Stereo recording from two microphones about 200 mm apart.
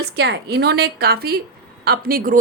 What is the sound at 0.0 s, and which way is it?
A woman's voice, 55° right (ahead or behind).